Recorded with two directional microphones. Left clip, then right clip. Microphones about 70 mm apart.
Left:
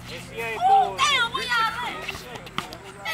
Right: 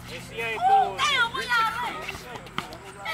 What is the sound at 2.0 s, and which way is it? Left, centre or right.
Run, centre.